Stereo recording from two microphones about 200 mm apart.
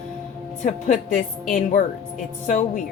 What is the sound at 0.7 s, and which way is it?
Speech, 35° left (ahead or behind).